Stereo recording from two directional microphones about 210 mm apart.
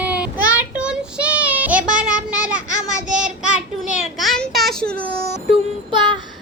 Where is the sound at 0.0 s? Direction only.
5° right (ahead or behind).